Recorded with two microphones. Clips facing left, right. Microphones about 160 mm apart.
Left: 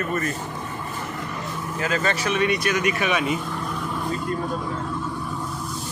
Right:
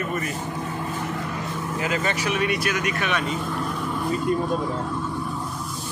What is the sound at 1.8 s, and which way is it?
A man's voice, 15° right (ahead or behind).